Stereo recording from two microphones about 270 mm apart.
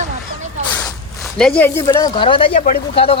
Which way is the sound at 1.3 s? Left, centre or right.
Centre.